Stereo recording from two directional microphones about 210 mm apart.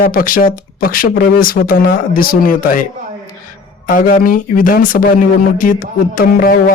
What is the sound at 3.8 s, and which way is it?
Speech, 40° left (ahead or behind).